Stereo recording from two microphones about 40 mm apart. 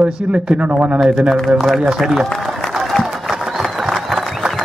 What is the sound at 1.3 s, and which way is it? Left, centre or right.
Speech, centre.